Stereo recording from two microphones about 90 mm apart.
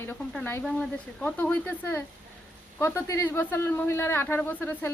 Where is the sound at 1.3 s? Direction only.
20° left (ahead or behind).